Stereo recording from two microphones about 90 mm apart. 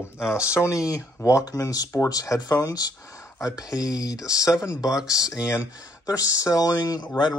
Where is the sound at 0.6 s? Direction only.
35° left (ahead or behind).